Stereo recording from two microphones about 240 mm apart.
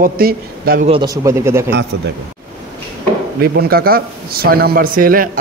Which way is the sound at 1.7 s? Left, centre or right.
Right.